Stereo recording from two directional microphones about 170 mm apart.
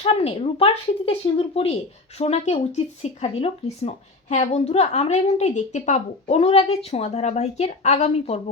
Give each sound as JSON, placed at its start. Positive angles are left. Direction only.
{"t": 0.0, "sound": "speech", "side_deg": 35}